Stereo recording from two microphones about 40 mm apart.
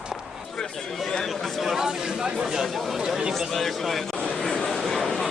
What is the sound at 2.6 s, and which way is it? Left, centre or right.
Speech, centre.